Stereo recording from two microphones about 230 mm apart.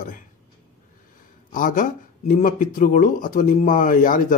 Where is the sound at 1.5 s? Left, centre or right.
Left.